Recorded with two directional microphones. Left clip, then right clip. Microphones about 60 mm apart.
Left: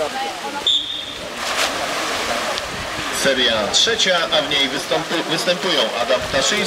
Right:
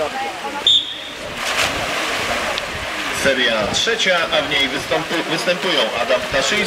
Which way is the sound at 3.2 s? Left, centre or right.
Left.